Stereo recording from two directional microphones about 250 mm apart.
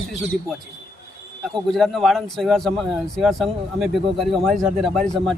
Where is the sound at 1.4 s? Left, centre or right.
Centre.